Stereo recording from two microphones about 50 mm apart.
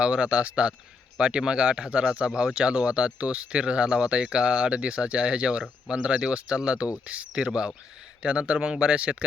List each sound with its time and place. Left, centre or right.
0.0 s speech: right